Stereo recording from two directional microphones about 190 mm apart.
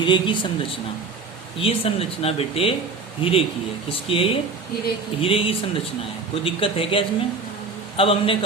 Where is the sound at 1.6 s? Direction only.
30° left (ahead or behind).